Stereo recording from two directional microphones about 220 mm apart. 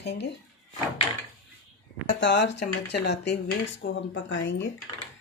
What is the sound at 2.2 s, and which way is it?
Speech, 55° left (ahead or behind).